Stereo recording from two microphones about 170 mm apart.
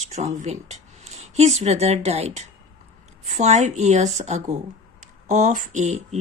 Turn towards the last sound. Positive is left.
turn(degrees=-40)  # may be behind; listen again after turning